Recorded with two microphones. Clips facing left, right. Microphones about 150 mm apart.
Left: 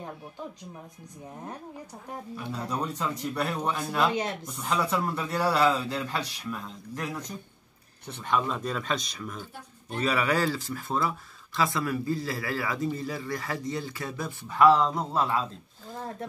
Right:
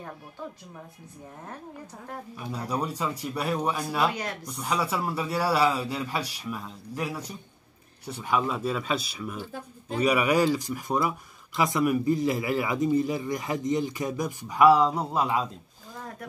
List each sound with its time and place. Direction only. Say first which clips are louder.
2.5 s speech: right 2 dB; 10° right (ahead or behind)
4.1 s speech: left 4 dB; 25° left (ahead or behind)
4.5 s speech: right 3 dB; 5° right (ahead or behind)